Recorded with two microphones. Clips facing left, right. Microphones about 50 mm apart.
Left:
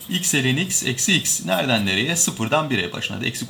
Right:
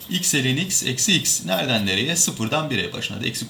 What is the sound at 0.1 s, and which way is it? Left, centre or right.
Speech, left.